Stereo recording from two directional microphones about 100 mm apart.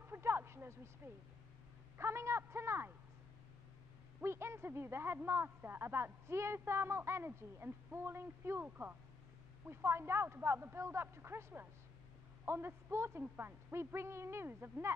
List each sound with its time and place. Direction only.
0.0 s a sound: 25° right (ahead or behind)
2.0 s speech: 25° right (ahead or behind)
4.2 s speech: 25° right (ahead or behind)